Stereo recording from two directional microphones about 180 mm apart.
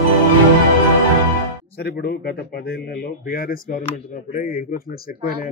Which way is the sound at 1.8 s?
60° left (ahead or behind).